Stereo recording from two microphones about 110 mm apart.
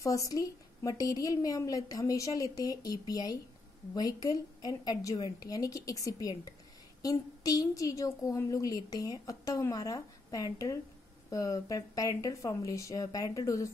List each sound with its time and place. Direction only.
0.0 s a woman's voice: 30° left (ahead or behind)